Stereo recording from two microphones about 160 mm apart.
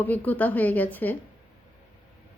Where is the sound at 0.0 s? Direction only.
10° left (ahead or behind).